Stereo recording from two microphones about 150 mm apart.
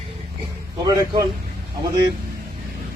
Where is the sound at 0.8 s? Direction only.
25° right (ahead or behind).